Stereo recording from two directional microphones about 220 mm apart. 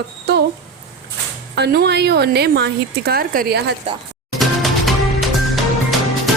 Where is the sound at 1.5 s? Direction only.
50° right (ahead or behind).